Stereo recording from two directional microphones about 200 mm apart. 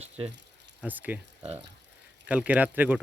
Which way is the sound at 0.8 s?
10° right (ahead or behind).